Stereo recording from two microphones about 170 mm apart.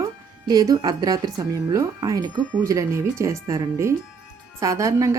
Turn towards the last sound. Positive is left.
turn(degrees=-20)  # may be behind; listen again after turning